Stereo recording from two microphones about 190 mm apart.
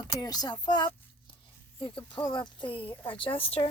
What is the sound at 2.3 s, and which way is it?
Speech, 25° left (ahead or behind).